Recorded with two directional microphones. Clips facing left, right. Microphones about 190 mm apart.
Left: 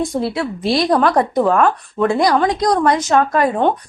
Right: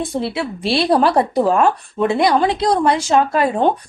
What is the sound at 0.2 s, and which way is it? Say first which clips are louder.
Speech: left 2 dB; 30° right (ahead or behind).